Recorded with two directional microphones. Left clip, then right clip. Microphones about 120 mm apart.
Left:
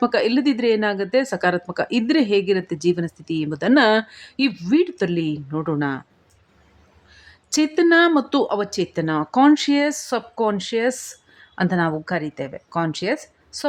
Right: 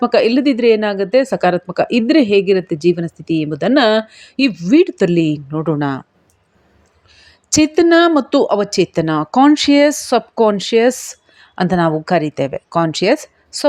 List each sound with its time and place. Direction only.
0.0 s a woman's voice: 30° right (ahead or behind)
5.5 s a woman's voice: 25° right (ahead or behind)
7.1 s a woman's voice: 30° right (ahead or behind)